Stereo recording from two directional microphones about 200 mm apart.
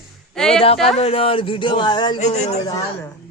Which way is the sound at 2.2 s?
35° left (ahead or behind).